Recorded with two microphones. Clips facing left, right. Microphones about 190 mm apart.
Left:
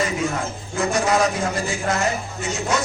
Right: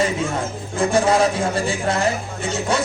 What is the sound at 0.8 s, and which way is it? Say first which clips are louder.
Speech: right 3 dB; 30° right (ahead or behind).